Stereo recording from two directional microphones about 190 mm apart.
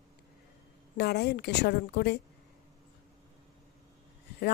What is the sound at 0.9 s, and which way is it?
A woman's voice, 60° left (ahead or behind).